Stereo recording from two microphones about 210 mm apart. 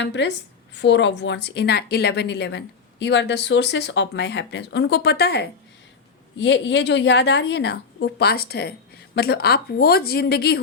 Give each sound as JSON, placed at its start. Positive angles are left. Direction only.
{"t": 0.0, "sound": "a woman's voice", "side_deg": 55}